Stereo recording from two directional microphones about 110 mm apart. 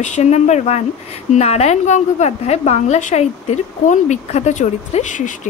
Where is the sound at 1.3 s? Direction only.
75° left (ahead or behind).